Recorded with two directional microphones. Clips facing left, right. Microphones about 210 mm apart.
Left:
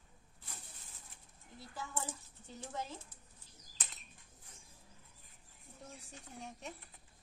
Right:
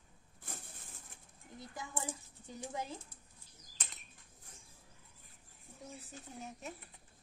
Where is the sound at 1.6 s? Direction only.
15° right (ahead or behind).